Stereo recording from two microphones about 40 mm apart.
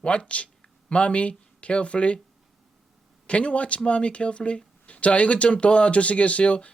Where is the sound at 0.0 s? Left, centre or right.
Left.